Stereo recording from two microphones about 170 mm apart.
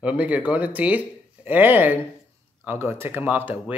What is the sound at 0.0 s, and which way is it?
Speech, 10° right (ahead or behind).